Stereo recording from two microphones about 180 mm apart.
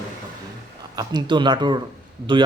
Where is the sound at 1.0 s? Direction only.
25° right (ahead or behind).